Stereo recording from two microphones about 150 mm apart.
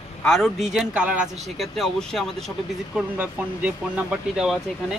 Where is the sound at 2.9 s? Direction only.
10° right (ahead or behind).